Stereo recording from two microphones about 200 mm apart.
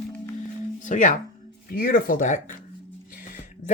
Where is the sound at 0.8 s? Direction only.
40° left (ahead or behind).